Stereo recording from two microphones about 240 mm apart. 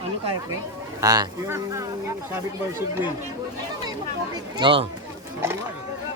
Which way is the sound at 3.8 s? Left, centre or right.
Centre.